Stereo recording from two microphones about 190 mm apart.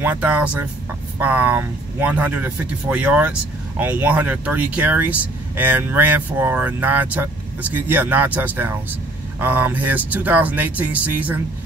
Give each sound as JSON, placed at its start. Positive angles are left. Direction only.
{"t": 0.0, "sound": "speech", "side_deg": -10}